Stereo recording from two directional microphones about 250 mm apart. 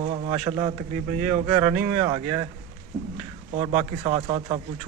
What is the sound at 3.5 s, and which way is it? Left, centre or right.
Speech, right.